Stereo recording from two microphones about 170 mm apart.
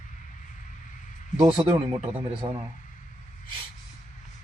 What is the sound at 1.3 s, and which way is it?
Speech, 30° right (ahead or behind).